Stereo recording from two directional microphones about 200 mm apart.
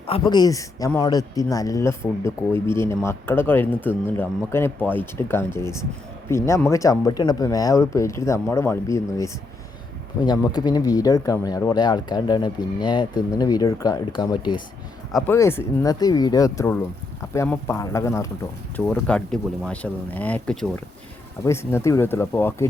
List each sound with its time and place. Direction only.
0.1 s speech: 20° left (ahead or behind)
15.3 s speech: 10° left (ahead or behind)